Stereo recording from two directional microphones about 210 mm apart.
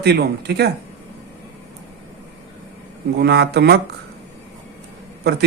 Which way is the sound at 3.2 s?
50° right (ahead or behind).